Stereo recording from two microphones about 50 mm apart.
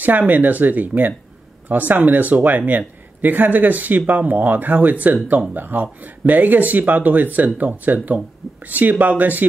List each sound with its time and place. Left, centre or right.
0.0 s speech: right